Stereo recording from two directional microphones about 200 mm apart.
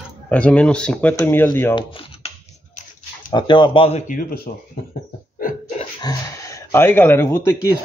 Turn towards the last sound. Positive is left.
turn(degrees=15)  # may be behind; listen again after turning